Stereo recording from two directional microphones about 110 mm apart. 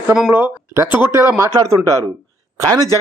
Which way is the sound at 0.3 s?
20° right (ahead or behind).